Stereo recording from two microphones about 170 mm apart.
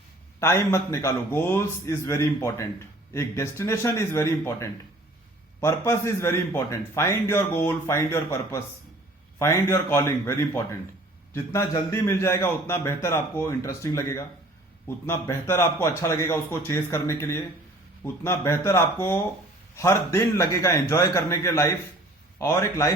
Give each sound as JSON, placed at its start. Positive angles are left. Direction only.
{"t": 0.3, "sound": "a man's voice", "side_deg": 15}